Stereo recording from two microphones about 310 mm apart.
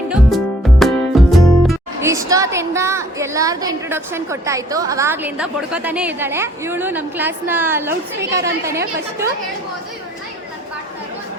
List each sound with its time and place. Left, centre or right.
0.1 s speech: centre
8.8 s a woman's voice: right